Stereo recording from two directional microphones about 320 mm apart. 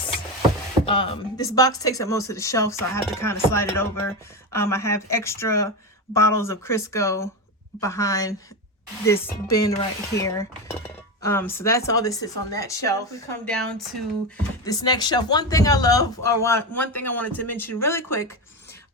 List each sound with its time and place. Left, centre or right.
0.9 s speech: centre